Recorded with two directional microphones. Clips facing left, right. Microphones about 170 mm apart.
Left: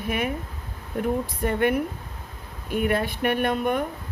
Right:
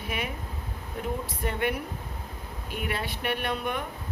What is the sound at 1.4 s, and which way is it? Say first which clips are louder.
Speech: left 6 dB; 50° left (ahead or behind).